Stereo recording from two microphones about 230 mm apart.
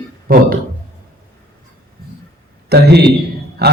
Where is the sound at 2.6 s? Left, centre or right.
Right.